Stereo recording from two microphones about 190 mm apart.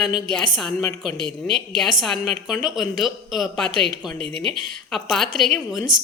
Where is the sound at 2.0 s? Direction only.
Centre (ahead or behind).